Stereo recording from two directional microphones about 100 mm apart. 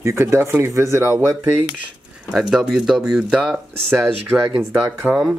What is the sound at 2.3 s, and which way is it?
Speech, 5° right (ahead or behind).